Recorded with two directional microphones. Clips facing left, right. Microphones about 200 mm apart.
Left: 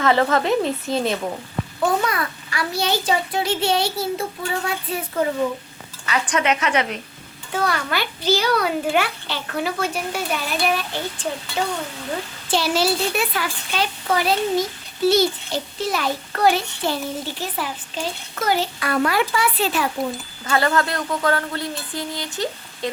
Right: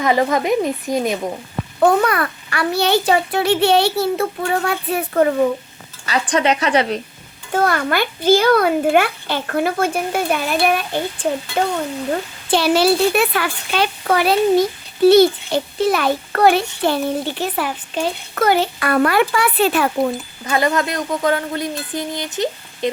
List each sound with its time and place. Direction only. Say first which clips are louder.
0.0 s a woman's voice: right 1 dB; 15° right (ahead or behind)
1.8 s a child's voice: right 7 dB; 60° right (ahead or behind)
6.1 s a woman's voice: right 4 dB; 35° right (ahead or behind)
7.5 s a child's voice: right 6 dB; 50° right (ahead or behind)
20.4 s speech: right 2 dB; 20° right (ahead or behind)